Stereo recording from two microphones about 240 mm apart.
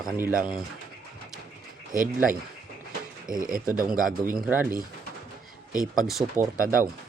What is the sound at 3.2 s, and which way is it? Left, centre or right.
Speech, right.